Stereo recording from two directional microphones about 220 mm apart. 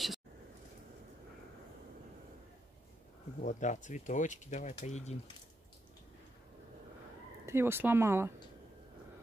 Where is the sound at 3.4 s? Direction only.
35° left (ahead or behind).